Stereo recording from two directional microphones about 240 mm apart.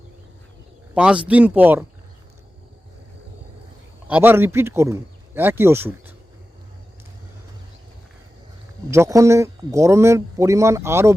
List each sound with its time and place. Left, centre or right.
0.9 s speech: centre
4.1 s speech: centre
8.9 s speech: centre